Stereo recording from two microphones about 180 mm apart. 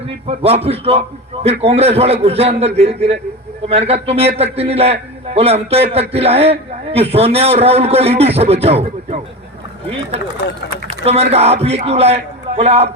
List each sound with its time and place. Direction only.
0.3 s a man's voice: 35° right (ahead or behind)
11.0 s a man's voice: 35° right (ahead or behind)